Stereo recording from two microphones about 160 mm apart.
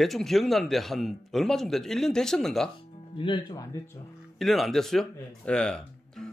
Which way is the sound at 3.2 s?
25° left (ahead or behind).